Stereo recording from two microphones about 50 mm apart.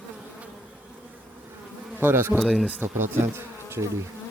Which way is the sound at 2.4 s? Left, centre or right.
Centre.